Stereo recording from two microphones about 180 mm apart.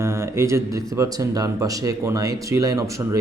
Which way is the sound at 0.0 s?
15° right (ahead or behind).